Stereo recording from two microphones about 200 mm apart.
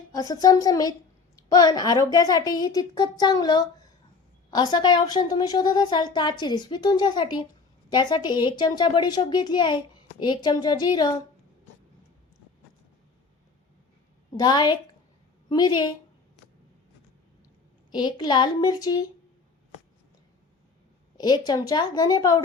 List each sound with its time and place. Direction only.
0.1 s a woman's voice: 20° left (ahead or behind)
14.3 s speech: 20° left (ahead or behind)
17.9 s speech: 20° left (ahead or behind)
21.2 s speech: 20° left (ahead or behind)